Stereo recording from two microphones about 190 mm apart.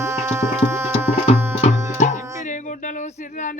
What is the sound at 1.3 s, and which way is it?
Music, 35° left (ahead or behind).